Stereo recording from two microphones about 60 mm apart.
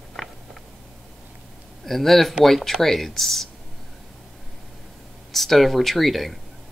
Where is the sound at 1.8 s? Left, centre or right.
Centre.